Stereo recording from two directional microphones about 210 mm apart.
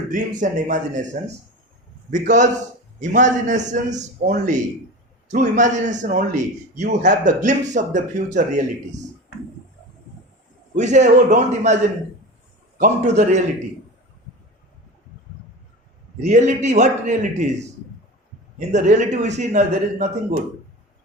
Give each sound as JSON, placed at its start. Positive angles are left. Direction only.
{"t": 0.1, "sound": "a man's voice", "side_deg": -40}
{"t": 2.0, "sound": "a man's voice", "side_deg": -35}
{"t": 10.8, "sound": "a man's voice", "side_deg": -35}
{"t": 12.8, "sound": "a man's voice", "side_deg": -35}
{"t": 16.2, "sound": "a man's voice", "side_deg": -35}
{"t": 18.7, "sound": "a man's voice", "side_deg": -35}